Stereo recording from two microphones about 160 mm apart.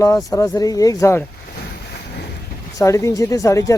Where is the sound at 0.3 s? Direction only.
20° left (ahead or behind).